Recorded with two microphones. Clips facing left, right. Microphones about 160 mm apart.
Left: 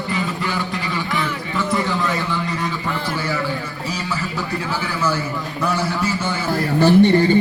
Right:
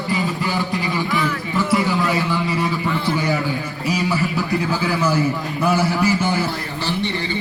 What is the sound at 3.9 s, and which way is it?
A man's voice, 15° right (ahead or behind).